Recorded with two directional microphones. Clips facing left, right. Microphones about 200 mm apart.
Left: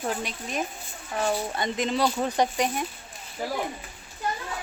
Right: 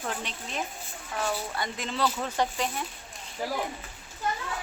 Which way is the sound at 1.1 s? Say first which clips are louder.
Left 4 dB; 20° left (ahead or behind).